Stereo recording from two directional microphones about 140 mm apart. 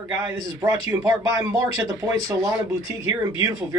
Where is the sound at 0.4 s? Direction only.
25° right (ahead or behind).